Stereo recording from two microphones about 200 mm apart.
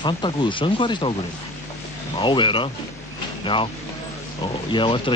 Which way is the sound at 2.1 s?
25° left (ahead or behind).